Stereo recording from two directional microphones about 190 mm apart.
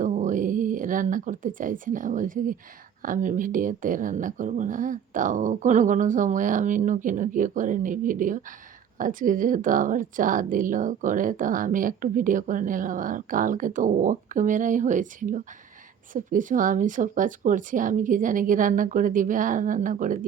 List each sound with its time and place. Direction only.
0.0 s speech: 40° right (ahead or behind)